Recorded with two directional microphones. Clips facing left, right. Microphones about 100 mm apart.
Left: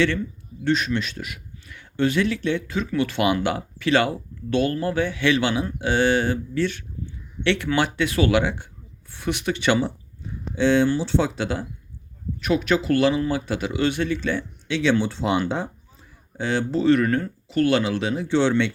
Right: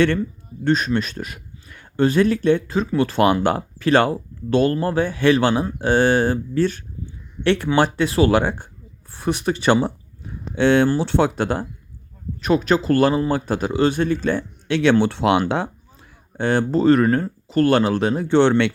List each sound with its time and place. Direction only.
0.6 s a man's voice: 40° right (ahead or behind)
9.8 s a sound: 55° right (ahead or behind)
10.8 s speech: 55° right (ahead or behind)
12.4 s speech: 40° right (ahead or behind); by 15.7 s 70° right (ahead or behind)
16.4 s speech: 50° right (ahead or behind)